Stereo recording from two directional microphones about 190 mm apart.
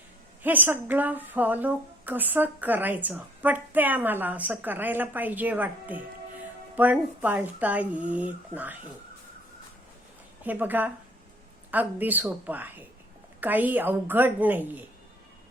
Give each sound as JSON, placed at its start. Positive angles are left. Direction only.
{"t": 0.4, "sound": "a woman's voice", "side_deg": -10}
{"t": 10.4, "sound": "a woman's voice", "side_deg": -10}